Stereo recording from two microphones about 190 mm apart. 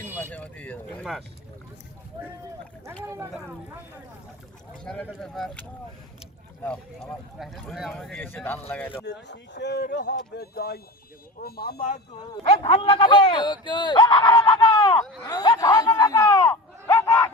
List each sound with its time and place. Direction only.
0.3 s speech: 5° left (ahead or behind)
3.0 s speech: 15° right (ahead or behind)
4.8 s speech: 5° left (ahead or behind)
9.0 s speech: 65° left (ahead or behind); by 11.9 s 50° left (ahead or behind)
12.4 s speech: 30° left (ahead or behind)
15.2 s chatter: 20° left (ahead or behind)